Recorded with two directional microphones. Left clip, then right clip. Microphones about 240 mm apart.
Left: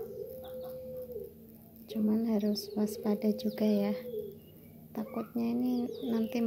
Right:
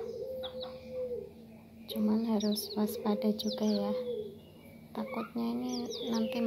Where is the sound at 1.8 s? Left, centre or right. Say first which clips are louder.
Even; left.